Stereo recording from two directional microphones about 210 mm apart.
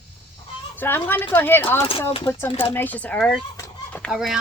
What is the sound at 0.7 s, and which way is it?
Speech, 10° left (ahead or behind).